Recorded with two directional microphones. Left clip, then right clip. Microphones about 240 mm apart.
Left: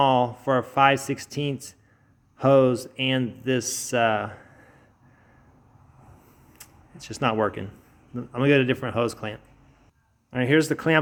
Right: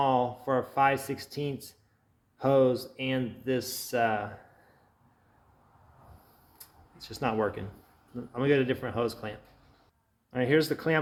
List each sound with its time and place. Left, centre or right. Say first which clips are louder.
0.0 s speech: left 6 dB; left
6.6 s speech: left 4 dB; left